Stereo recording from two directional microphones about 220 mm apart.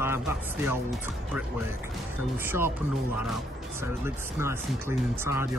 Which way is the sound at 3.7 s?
10° right (ahead or behind).